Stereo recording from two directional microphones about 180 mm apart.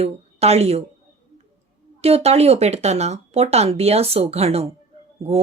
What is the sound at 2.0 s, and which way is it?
Speech, 35° right (ahead or behind).